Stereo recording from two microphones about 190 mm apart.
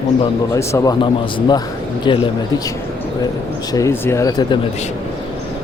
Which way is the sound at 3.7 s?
15° left (ahead or behind).